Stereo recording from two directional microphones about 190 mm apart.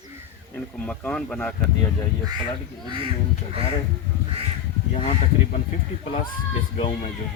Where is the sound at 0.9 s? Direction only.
5° left (ahead or behind).